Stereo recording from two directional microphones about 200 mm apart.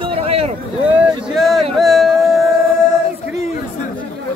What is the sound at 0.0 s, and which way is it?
Vehicle, 30° right (ahead or behind).